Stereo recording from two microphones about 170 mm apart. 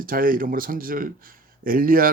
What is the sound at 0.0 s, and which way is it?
Speech, 55° right (ahead or behind).